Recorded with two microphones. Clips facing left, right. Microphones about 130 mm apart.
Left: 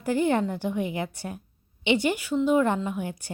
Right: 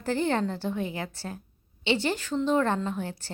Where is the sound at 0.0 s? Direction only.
15° left (ahead or behind).